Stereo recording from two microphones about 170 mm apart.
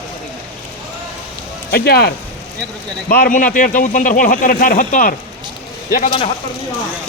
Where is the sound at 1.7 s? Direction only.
70° left (ahead or behind).